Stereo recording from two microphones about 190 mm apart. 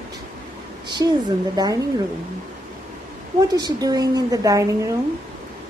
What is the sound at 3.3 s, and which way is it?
Speech, 20° right (ahead or behind).